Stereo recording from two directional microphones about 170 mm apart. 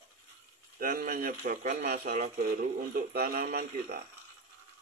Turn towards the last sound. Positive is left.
turn(degrees=-60)  # may be behind; listen again after turning